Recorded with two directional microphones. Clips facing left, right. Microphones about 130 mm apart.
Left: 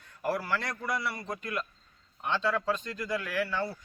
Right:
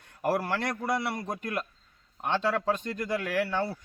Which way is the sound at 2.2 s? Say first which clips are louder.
Right 2 dB; 55° right (ahead or behind).